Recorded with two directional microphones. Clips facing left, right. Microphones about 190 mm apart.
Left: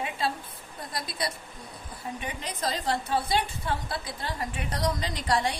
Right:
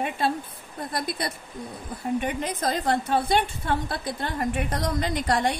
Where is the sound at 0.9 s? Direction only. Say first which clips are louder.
Right 3 dB; 55° right (ahead or behind).